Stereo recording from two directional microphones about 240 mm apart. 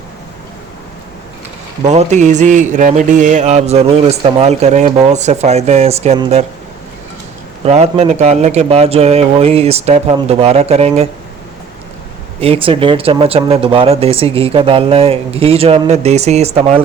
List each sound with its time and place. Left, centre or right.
1.9 s mantra: right
7.6 s mantra: right
12.4 s mantra: right